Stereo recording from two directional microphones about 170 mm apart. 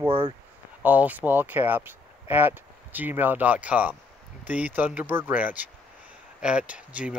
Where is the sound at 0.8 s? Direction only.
10° right (ahead or behind).